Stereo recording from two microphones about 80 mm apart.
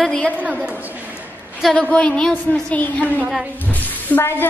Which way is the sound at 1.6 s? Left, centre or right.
Centre.